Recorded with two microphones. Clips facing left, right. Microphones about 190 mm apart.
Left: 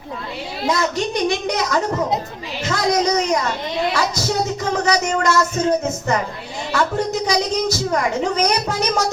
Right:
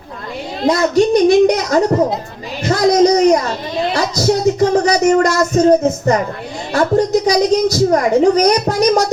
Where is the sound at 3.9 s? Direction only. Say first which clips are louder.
Right 5 dB; 35° right (ahead or behind).